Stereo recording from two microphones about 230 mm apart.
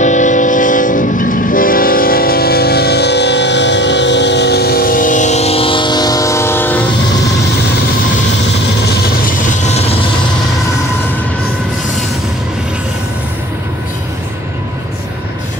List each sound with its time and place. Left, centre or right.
0.0 s train: left; by 6.8 s centre
9.2 s vehicle: left